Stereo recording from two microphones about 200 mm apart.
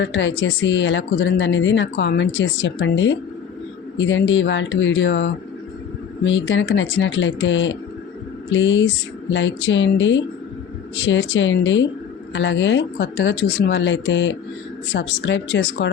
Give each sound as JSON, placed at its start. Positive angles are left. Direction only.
{"t": 0.0, "sound": "speech", "side_deg": 65}